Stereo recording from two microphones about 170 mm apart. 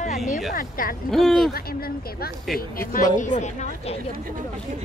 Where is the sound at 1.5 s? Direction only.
60° left (ahead or behind).